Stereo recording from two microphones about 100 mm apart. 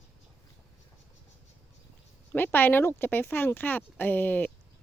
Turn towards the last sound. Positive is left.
turn(degrees=15)  # may be behind; listen again after turning